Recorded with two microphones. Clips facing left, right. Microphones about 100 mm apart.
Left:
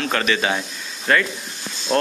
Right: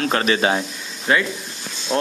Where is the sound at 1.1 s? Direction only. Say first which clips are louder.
Even; 15° right (ahead or behind).